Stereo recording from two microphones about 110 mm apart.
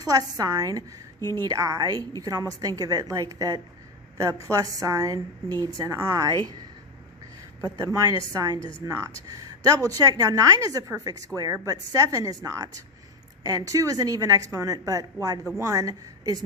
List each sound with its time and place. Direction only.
0.0 s a woman's voice: 35° right (ahead or behind)
8.3 s a woman's voice: 30° right (ahead or behind)